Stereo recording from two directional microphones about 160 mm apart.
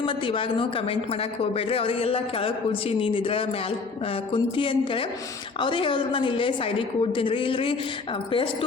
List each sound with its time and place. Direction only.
0.0 s speech: 35° left (ahead or behind)